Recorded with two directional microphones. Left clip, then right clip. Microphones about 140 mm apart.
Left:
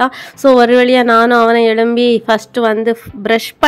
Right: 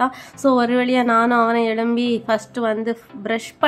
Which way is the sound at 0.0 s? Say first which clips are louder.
Left 7 dB; 40° left (ahead or behind).